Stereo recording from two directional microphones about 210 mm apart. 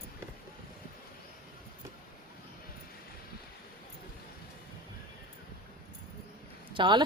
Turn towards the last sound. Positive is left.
turn(degrees=-20)  # may be behind; listen again after turning